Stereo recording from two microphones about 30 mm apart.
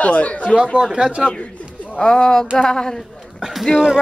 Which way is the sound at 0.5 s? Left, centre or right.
Right.